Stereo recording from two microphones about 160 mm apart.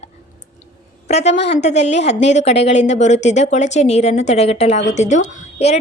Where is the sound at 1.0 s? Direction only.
45° left (ahead or behind).